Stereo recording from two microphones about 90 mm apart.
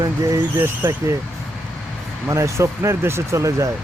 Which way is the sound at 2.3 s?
30° right (ahead or behind).